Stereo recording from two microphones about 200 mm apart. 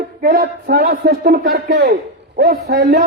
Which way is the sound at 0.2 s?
50° right (ahead or behind).